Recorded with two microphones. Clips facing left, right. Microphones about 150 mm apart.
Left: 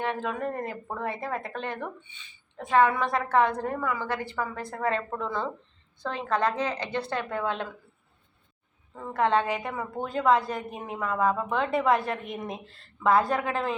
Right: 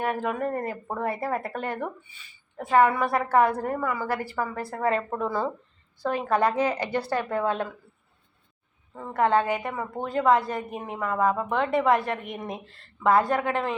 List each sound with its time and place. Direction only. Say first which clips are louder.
0.0 s speech: right 3 dB; 10° right (ahead or behind)
9.0 s speech: right 2 dB; 5° right (ahead or behind)
12.3 s speech: even; 25° right (ahead or behind)
12.6 s speech: right 2 dB; centre (ahead or behind)